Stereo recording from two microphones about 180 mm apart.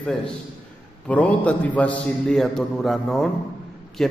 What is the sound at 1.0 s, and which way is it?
A man's voice, 5° left (ahead or behind).